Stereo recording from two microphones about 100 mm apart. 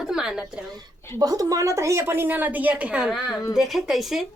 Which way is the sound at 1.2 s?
35° right (ahead or behind).